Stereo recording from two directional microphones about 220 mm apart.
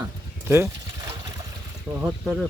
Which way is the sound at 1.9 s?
15° right (ahead or behind).